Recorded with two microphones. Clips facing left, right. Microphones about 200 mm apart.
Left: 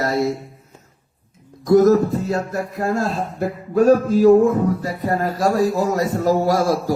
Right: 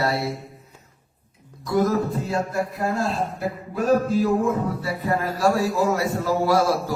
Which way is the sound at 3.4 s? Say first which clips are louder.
Left 8 dB; 45° left (ahead or behind).